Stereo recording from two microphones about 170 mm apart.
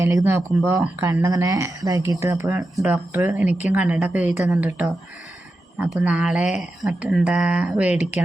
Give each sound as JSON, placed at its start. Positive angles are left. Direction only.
{"t": 0.0, "sound": "speech", "side_deg": -20}
{"t": 5.9, "sound": "speech", "side_deg": -5}